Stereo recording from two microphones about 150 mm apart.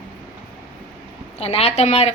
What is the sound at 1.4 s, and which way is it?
Speech, 40° left (ahead or behind).